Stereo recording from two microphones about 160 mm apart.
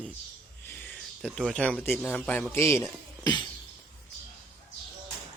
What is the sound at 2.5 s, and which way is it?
Speech, 15° left (ahead or behind).